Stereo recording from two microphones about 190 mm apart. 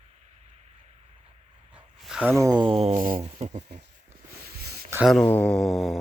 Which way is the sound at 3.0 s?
45° right (ahead or behind).